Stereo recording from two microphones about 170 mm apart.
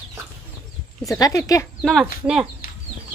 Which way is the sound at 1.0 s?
20° left (ahead or behind).